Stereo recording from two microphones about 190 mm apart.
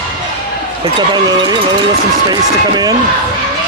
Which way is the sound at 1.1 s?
20° right (ahead or behind).